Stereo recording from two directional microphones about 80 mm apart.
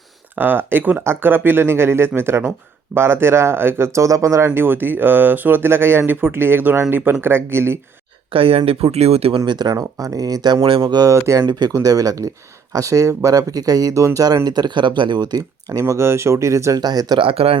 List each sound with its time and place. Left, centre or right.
0.3 s speech: right
8.3 s speech: right
9.5 s speech: right
9.7 s speech: right
11.0 s speech: right
14.4 s speech: right
15.8 s speech: right
16.8 s speech: right